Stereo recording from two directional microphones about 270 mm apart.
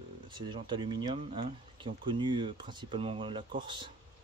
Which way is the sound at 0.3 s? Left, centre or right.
Centre.